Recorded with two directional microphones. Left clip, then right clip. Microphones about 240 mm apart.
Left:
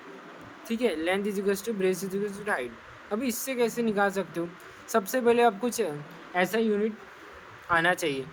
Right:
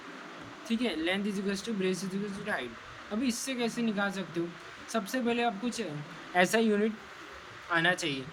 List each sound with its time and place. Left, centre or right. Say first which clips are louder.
0.7 s speech: left 4 dB; centre
6.3 s speech: even; centre